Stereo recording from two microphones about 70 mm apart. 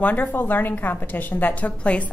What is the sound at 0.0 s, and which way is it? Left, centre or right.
A woman's voice, left.